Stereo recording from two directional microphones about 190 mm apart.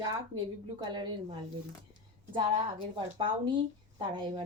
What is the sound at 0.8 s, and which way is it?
Speech, 20° right (ahead or behind).